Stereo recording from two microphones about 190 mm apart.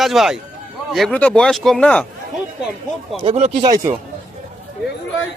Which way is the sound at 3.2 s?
30° right (ahead or behind).